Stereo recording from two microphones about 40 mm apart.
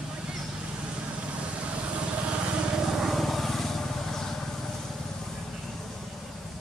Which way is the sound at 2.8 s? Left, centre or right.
Centre.